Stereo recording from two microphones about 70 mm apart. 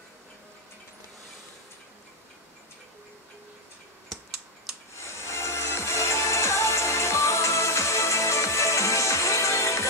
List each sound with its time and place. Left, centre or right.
4.9 s music: left